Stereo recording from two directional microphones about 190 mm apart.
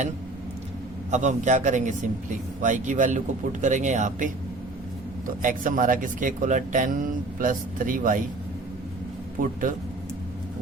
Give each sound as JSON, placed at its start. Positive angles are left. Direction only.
{"t": 1.1, "sound": "a man's voice", "side_deg": -40}
{"t": 5.4, "sound": "speech", "side_deg": -45}
{"t": 9.4, "sound": "speech", "side_deg": -45}